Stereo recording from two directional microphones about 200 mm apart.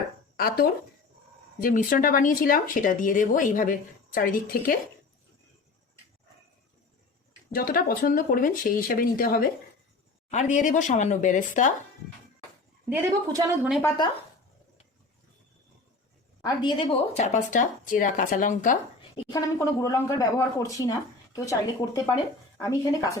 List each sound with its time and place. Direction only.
0.3 s speech: 50° left (ahead or behind)
7.5 s speech: 45° left (ahead or behind)
12.9 s speech: 15° right (ahead or behind)
13.8 s a woman's voice: 20° left (ahead or behind)
16.4 s a woman's voice: 20° left (ahead or behind)
17.2 s speech: 35° left (ahead or behind)
19.1 s speech: 20° left (ahead or behind)